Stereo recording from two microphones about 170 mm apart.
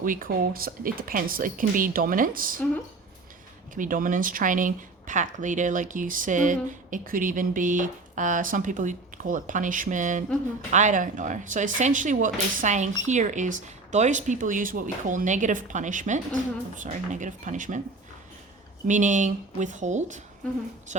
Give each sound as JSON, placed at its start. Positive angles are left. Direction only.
{"t": 0.0, "sound": "speech", "side_deg": -55}
{"t": 3.8, "sound": "speech", "side_deg": -50}
{"t": 18.9, "sound": "speech", "side_deg": -45}